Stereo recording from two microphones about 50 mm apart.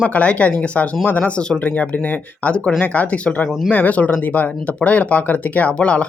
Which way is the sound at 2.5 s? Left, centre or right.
Left.